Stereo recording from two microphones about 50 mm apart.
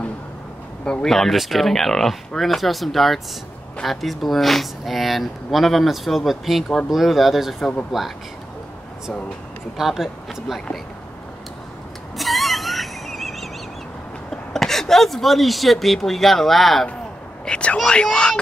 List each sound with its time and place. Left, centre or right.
1.0 s speech: centre
9.8 s speech: centre
12.2 s music: centre
14.3 s speech: centre
17.5 s speech: left